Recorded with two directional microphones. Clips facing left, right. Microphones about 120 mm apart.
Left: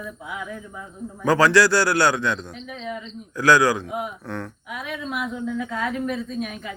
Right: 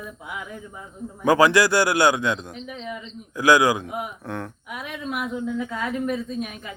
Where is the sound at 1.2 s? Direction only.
15° right (ahead or behind).